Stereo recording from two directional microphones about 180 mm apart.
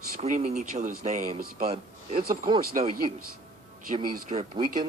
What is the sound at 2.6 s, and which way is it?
Speech, 55° right (ahead or behind).